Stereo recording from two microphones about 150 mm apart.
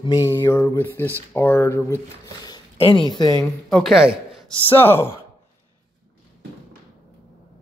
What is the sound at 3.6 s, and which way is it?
Speech, centre (ahead or behind).